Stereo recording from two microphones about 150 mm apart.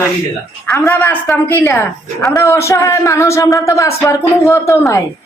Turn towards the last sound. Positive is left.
turn(degrees=20)  # may be behind; listen again after turning